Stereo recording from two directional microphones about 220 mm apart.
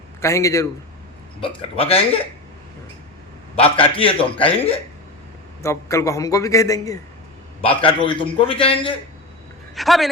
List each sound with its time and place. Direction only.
0.2 s a man's voice: 15° left (ahead or behind)
1.4 s a man's voice: 25° left (ahead or behind)
3.5 s a man's voice: 25° left (ahead or behind)
5.6 s a man's voice: 15° left (ahead or behind)
9.7 s speech: centre (ahead or behind)